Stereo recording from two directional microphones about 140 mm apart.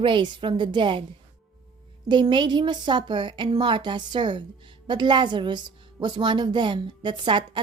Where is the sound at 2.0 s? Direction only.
35° right (ahead or behind).